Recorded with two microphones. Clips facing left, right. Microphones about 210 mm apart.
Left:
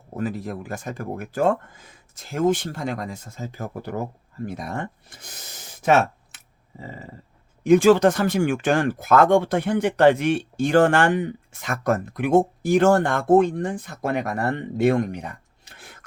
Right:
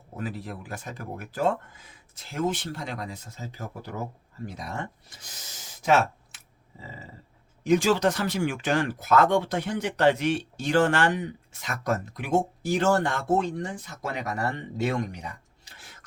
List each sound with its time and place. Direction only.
0.2 s speech: 45° left (ahead or behind)